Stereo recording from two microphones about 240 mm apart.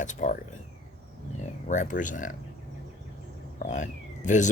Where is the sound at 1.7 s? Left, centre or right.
Left.